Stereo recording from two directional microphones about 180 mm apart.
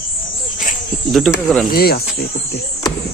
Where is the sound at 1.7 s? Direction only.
60° left (ahead or behind).